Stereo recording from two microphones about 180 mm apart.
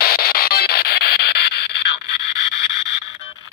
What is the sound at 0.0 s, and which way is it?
Music, 55° left (ahead or behind).